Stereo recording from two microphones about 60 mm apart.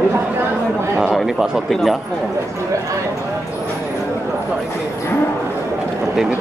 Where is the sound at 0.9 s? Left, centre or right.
Centre.